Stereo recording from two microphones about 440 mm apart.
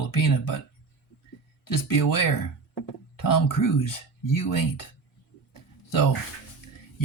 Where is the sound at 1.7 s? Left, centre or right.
Left.